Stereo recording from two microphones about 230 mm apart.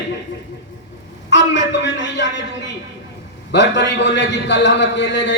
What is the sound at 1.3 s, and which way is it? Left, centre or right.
A man's voice, left.